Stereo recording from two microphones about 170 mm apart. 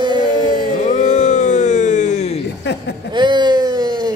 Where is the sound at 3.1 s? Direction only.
25° right (ahead or behind).